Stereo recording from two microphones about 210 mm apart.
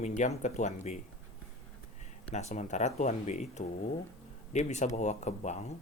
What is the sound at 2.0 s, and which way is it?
Speech, 35° left (ahead or behind).